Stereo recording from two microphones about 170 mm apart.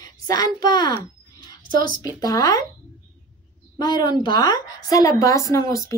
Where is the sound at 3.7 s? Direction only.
25° left (ahead or behind).